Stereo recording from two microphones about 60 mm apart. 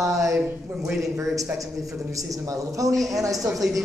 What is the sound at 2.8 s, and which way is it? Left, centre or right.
Speech, right.